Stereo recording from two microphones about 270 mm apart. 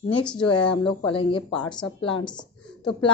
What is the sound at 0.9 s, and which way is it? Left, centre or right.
A woman's voice, centre.